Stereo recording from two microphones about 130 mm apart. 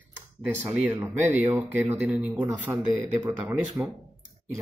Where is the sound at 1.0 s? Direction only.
10° right (ahead or behind).